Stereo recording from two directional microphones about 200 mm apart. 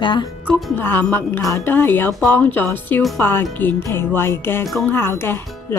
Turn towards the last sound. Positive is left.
turn(degrees=10)  # may be behind; listen again after turning